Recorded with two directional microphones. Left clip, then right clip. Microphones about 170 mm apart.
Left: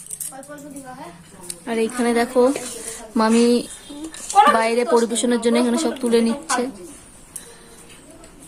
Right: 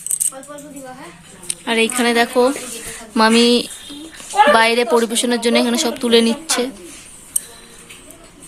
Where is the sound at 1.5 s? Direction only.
Centre (ahead or behind).